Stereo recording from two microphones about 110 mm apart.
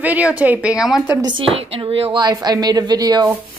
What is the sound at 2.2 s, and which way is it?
Speech, 40° right (ahead or behind).